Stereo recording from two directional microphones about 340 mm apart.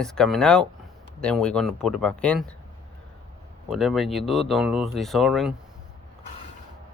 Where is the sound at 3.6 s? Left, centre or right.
Centre.